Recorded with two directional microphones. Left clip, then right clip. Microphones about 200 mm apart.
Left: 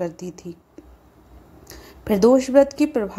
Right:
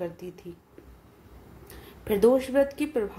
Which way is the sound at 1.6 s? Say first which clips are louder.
Left 5 dB; 35° left (ahead or behind).